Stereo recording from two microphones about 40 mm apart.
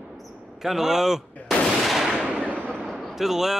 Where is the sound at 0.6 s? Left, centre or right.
Centre.